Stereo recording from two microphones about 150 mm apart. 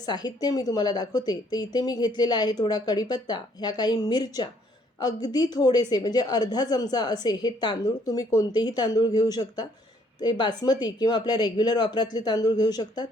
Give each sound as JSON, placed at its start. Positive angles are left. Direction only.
{"t": 0.0, "sound": "speech", "side_deg": 30}